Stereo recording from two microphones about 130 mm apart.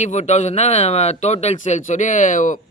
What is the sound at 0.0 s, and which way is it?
Speech, 60° left (ahead or behind).